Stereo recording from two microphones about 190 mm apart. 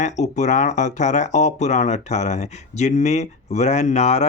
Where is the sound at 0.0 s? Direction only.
40° left (ahead or behind).